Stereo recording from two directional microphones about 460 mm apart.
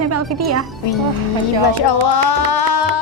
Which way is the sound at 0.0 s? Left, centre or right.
Right.